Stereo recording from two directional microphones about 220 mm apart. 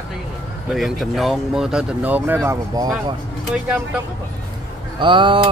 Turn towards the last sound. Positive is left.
turn(degrees=-20)  # may be behind; listen again after turning